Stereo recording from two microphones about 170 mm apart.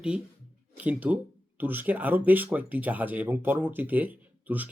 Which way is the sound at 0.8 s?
10° right (ahead or behind).